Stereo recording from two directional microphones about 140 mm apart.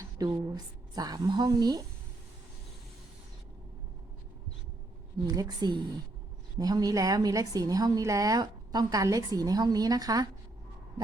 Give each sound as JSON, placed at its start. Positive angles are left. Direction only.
{"t": 0.3, "sound": "a woman's voice", "side_deg": -30}
{"t": 5.2, "sound": "a woman's voice", "side_deg": -25}